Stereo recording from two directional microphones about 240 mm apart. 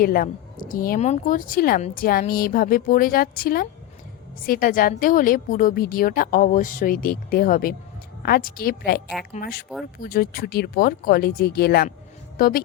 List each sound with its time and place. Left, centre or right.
0.0 s speech: left